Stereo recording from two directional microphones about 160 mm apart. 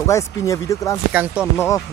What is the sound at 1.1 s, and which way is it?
Speech, 10° right (ahead or behind).